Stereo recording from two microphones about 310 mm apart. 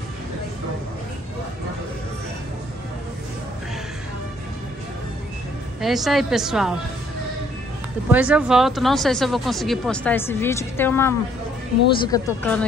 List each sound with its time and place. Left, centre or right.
5.8 s speech: centre
8.1 s speech: centre